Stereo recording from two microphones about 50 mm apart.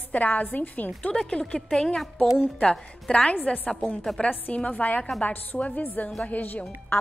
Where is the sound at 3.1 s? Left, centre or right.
Left.